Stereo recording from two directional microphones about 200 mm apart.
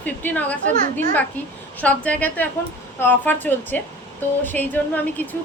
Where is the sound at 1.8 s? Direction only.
5° left (ahead or behind).